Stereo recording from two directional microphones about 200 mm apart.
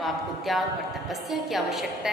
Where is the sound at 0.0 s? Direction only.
Centre (ahead or behind).